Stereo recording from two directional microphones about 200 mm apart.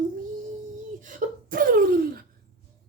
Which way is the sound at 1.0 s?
45° right (ahead or behind).